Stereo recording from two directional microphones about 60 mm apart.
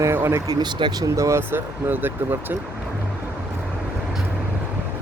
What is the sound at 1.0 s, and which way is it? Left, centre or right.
Speech, right.